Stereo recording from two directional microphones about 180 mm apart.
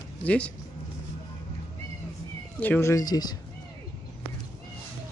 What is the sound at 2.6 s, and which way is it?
Speech, 10° left (ahead or behind).